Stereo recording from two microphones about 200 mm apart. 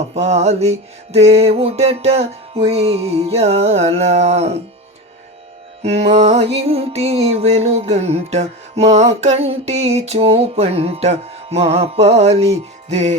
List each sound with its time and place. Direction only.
0.1 s music: 35° right (ahead or behind)
5.8 s music: 30° right (ahead or behind)